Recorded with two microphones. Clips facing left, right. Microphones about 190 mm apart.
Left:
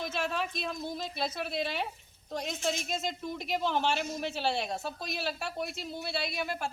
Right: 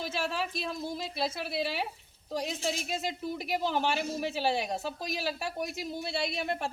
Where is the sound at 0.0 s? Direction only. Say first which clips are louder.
Even; 5° right (ahead or behind).